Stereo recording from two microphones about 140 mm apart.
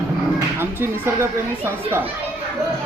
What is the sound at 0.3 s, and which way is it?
Speech, 15° right (ahead or behind).